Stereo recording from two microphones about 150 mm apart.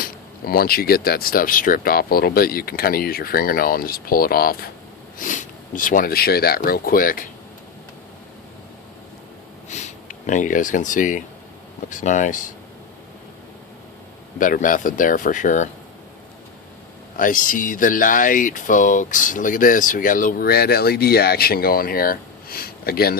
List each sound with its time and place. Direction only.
0.0 s speech: 85° left
5.1 s speech: 60° left (ahead or behind)
9.6 s speech: 50° left (ahead or behind)
14.3 s speech: 65° left (ahead or behind)
17.2 s speech: 60° left (ahead or behind); by 23.1 s 90° left